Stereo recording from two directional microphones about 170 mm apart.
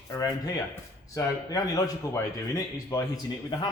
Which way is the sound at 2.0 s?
20° left (ahead or behind).